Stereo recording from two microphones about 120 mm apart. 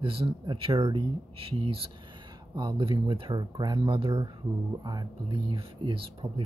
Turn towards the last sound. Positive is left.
turn(degrees=-45)  # may be behind; listen again after turning